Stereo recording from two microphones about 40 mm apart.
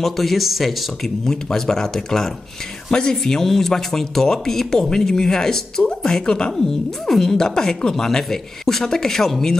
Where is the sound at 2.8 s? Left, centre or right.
Centre.